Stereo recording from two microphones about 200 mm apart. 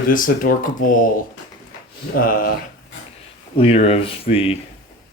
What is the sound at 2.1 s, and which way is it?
Speech, 45° left (ahead or behind).